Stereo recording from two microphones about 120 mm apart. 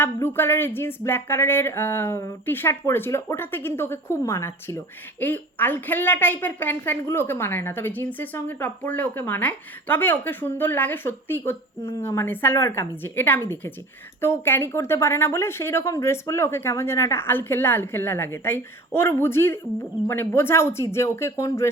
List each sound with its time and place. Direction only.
0.0 s a woman's voice: 20° left (ahead or behind)